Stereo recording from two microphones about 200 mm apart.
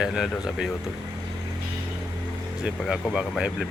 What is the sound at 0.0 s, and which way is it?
Speech, 5° right (ahead or behind).